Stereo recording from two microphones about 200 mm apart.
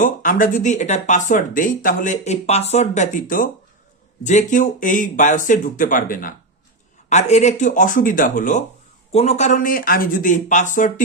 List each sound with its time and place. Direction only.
0.0 s speech: 40° left (ahead or behind)